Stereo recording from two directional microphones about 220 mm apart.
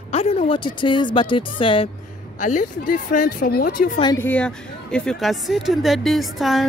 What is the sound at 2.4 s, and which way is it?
A woman's voice, 35° left (ahead or behind).